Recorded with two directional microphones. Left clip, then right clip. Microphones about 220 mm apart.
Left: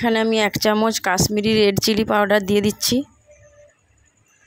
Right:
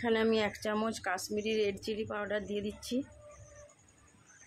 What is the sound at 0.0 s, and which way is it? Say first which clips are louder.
Speech: left 12 dB; 35° left (ahead or behind).